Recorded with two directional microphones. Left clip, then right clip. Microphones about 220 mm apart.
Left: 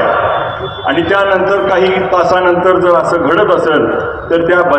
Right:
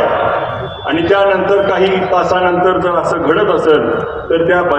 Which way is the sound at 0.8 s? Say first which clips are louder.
Even; 45° left (ahead or behind).